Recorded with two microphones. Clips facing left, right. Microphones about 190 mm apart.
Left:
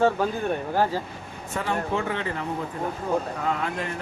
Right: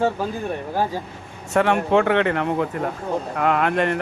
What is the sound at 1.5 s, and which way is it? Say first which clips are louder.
Speech: right 9 dB; 70° right (ahead or behind).